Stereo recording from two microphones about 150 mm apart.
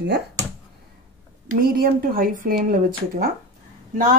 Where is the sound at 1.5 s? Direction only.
75° right (ahead or behind).